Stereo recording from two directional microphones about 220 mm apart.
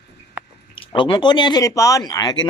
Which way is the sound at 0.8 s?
25° left (ahead or behind).